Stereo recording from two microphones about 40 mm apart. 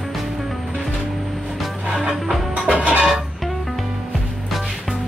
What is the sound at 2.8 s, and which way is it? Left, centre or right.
Music, right.